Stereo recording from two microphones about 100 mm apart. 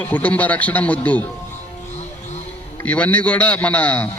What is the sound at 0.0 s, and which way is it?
A man's voice, 15° left (ahead or behind).